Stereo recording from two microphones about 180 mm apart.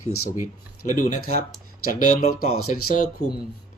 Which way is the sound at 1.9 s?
55° left (ahead or behind).